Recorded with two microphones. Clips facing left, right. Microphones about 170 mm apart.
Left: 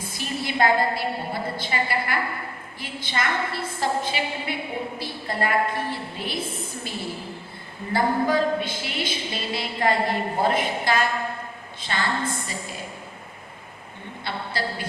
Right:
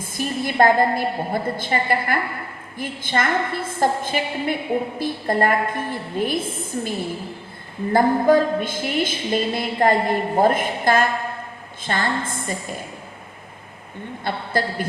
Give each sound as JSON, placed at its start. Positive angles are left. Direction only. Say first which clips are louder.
{"t": 0.0, "sound": "a woman's voice", "louder": "right 5 dB", "side_deg": -50}
{"t": 7.9, "sound": "a woman's voice", "louder": "right 6 dB", "side_deg": -50}
{"t": 14.3, "sound": "a woman's voice", "louder": "right 5 dB", "side_deg": -50}